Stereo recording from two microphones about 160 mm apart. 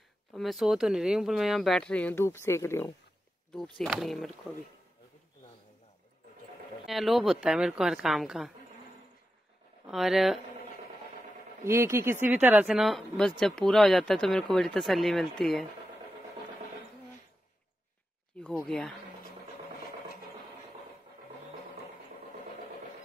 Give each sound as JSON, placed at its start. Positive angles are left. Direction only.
{"t": 0.3, "sound": "speech", "side_deg": 0}
{"t": 3.5, "sound": "speech", "side_deg": 0}
{"t": 6.9, "sound": "speech", "side_deg": 0}
{"t": 9.8, "sound": "speech", "side_deg": 0}
{"t": 11.6, "sound": "speech", "side_deg": -15}
{"t": 12.6, "sound": "speech", "side_deg": 0}